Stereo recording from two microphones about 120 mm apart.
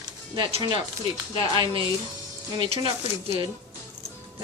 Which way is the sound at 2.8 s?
45° right (ahead or behind).